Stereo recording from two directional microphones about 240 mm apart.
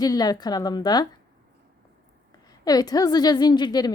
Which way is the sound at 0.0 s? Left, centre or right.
Centre.